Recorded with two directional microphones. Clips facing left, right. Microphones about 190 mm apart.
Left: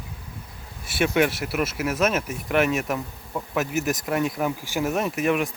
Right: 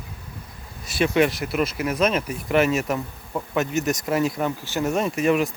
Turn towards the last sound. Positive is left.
turn(degrees=0)  # may be behind; listen again after turning